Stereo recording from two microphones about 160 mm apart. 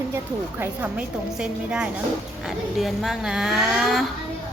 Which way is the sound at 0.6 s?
10° right (ahead or behind).